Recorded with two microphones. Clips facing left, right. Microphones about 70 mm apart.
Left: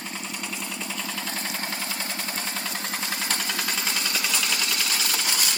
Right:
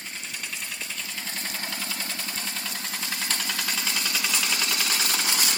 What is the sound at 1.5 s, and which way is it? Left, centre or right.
Vehicle, left.